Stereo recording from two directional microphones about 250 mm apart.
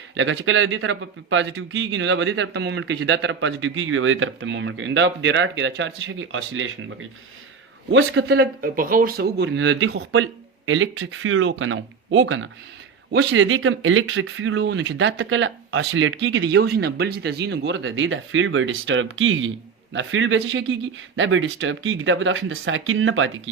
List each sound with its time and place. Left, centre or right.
0.1 s a man's voice: right